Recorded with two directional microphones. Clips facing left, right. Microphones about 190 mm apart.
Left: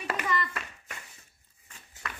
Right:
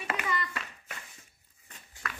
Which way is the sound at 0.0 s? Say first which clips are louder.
Left 2 dB; 40° left (ahead or behind).